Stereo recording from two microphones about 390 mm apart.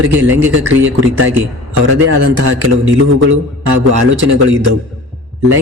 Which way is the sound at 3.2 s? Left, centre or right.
Right.